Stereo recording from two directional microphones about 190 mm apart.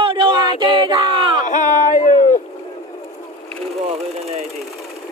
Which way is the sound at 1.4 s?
40° left (ahead or behind).